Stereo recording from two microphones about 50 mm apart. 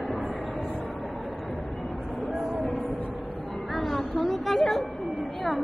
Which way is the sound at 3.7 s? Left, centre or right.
Centre.